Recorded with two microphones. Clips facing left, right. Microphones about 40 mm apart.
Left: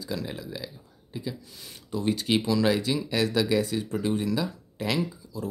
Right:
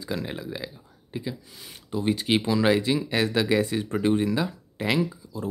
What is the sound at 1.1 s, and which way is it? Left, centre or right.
Speech, right.